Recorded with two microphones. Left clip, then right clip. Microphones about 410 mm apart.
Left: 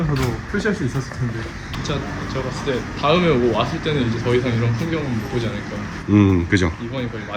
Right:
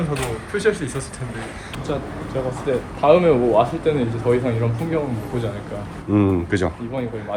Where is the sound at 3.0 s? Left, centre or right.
Centre.